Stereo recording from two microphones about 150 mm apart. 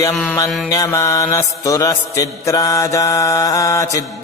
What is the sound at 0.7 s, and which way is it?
Mantra, 20° left (ahead or behind).